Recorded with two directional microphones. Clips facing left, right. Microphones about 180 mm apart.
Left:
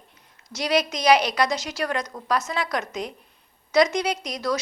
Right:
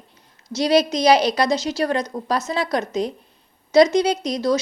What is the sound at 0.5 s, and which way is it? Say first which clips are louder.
A woman's voice: right 6 dB; 30° right (ahead or behind).